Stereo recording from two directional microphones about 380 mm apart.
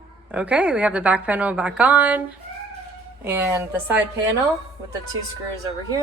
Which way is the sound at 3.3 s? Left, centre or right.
Centre.